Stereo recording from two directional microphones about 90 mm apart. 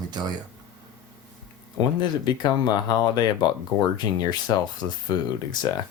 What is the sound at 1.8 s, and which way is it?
Speech, 55° left (ahead or behind).